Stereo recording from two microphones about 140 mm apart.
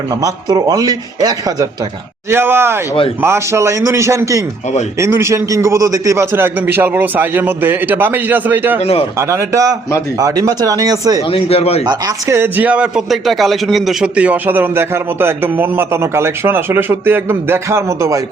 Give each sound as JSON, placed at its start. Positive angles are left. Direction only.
{"t": 0.1, "sound": "speech", "side_deg": -25}
{"t": 2.3, "sound": "a man's voice", "side_deg": -15}
{"t": 8.8, "sound": "a man's voice", "side_deg": 45}
{"t": 9.1, "sound": "speech", "side_deg": -20}
{"t": 11.3, "sound": "a man's voice", "side_deg": 45}
{"t": 11.9, "sound": "speech", "side_deg": -25}
{"t": 12.4, "sound": "a man's voice", "side_deg": -10}